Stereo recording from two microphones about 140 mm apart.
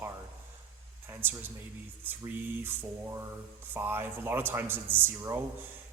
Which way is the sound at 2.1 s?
15° right (ahead or behind).